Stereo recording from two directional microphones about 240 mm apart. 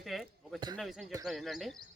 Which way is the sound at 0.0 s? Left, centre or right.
Centre.